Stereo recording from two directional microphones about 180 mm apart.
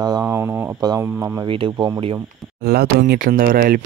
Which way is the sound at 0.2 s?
10° right (ahead or behind).